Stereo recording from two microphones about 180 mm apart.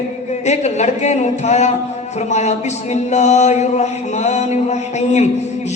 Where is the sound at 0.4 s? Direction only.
40° left (ahead or behind).